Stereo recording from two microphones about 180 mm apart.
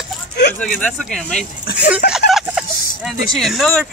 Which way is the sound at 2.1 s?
Centre (ahead or behind).